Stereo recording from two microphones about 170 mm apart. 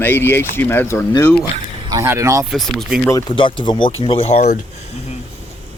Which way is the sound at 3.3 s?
30° left (ahead or behind).